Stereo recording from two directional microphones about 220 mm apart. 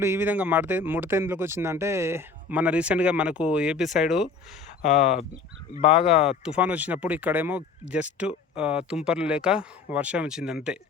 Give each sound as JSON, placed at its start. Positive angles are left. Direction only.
{"t": 0.0, "sound": "speech", "side_deg": -10}
{"t": 4.8, "sound": "speech", "side_deg": 35}
{"t": 6.2, "sound": "speech", "side_deg": -5}